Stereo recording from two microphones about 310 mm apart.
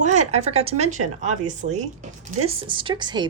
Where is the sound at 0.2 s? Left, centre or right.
Right.